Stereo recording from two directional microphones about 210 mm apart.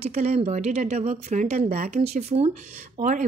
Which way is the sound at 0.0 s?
30° right (ahead or behind).